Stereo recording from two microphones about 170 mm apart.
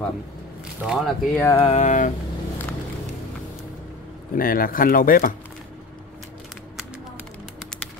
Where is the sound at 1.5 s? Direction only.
35° left (ahead or behind).